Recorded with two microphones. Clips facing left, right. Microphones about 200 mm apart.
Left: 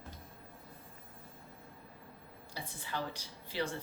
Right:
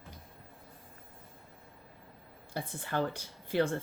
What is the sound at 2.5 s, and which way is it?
A woman's voice, 55° right (ahead or behind).